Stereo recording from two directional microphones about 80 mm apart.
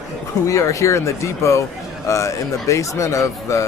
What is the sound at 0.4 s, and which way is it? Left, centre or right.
Speech, left.